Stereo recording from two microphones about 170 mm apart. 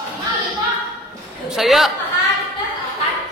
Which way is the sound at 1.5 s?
Centre (ahead or behind).